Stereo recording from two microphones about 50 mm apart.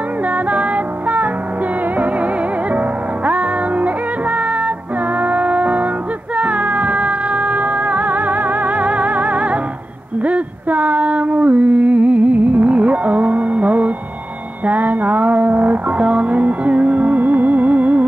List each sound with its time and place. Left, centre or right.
0.3 s music: right
10.2 s a sound: right
14.6 s music: right